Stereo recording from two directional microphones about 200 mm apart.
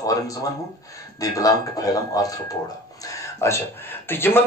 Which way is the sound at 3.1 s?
15° left (ahead or behind).